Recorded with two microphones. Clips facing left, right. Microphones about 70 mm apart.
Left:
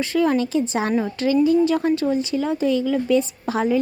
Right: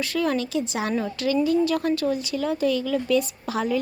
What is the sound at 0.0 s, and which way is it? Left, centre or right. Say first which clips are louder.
A woman's voice: left 5 dB; left.